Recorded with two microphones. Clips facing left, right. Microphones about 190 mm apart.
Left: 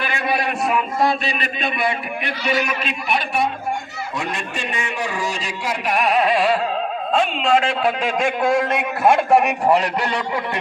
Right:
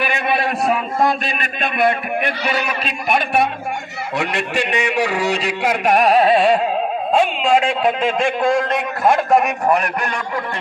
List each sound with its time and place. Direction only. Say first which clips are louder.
0.0 s a sound: right 3 dB; 20° right (ahead or behind)
0.6 s a man's voice: right 1 dB; 45° right (ahead or behind)
4.1 s a man's voice: right 6 dB; 70° right (ahead or behind); by 6.6 s 30° right (ahead or behind)
7.2 s a man's voice: right 2 dB; 5° right (ahead or behind); by 9.7 s 10° left (ahead or behind)